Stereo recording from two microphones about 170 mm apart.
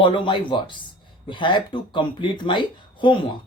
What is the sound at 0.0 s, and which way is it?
Speech, 30° left (ahead or behind).